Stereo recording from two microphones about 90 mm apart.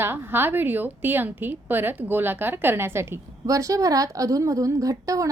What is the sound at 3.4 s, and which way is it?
A woman's voice, 40° right (ahead or behind).